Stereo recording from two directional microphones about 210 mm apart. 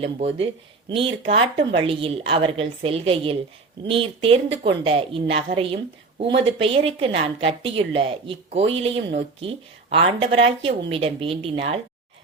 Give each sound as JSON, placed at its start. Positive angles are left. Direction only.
{"t": 0.0, "sound": "speech", "side_deg": -30}